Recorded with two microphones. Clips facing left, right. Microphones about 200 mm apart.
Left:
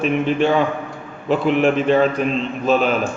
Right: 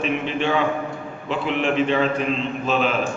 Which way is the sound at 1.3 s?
45° left (ahead or behind).